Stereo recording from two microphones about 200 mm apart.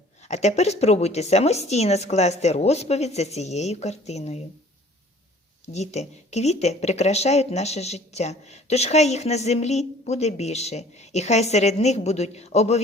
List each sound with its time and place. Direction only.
0.2 s speech: 35° left (ahead or behind)
5.6 s speech: 35° left (ahead or behind)